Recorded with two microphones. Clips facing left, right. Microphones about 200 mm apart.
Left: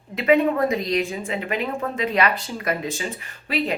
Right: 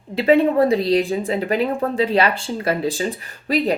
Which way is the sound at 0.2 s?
30° right (ahead or behind).